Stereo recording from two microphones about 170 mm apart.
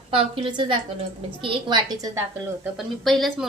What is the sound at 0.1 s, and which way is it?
A woman's voice, 30° right (ahead or behind).